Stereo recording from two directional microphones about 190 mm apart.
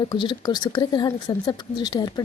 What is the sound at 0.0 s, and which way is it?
Speech, 25° left (ahead or behind).